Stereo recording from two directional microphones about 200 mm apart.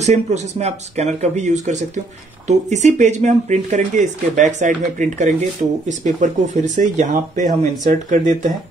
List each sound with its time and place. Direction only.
0.0 s speech: 35° right (ahead or behind)